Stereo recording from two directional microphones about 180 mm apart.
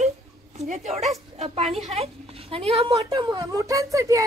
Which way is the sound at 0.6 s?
40° right (ahead or behind).